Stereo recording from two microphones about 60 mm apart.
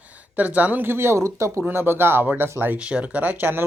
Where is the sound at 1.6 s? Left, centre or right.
Right.